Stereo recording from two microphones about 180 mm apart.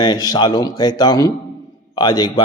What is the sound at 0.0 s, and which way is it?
A man's voice, 25° left (ahead or behind).